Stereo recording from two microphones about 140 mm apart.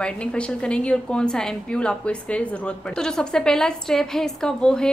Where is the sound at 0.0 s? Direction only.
10° left (ahead or behind).